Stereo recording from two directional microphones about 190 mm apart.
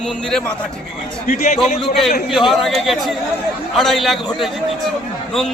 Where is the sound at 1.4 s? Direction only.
35° left (ahead or behind).